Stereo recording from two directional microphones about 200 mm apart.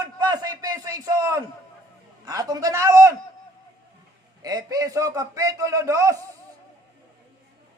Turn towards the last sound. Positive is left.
turn(degrees=-15)  # may be behind; listen again after turning